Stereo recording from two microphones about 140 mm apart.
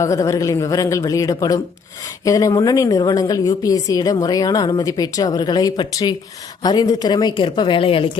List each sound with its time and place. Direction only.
0.0 s a woman's voice: 25° left (ahead or behind); by 8.1 s 40° left (ahead or behind)